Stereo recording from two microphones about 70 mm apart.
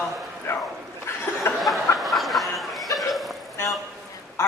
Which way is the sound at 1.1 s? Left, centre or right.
Left.